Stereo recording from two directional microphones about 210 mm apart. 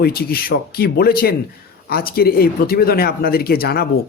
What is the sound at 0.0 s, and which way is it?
Speech, 50° left (ahead or behind).